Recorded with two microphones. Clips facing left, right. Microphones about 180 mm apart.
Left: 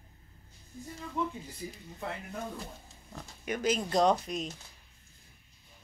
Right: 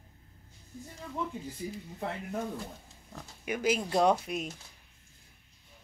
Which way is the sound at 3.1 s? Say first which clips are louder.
Even; 10° right (ahead or behind).